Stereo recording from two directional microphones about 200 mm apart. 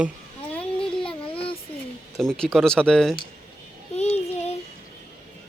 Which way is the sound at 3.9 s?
30° left (ahead or behind).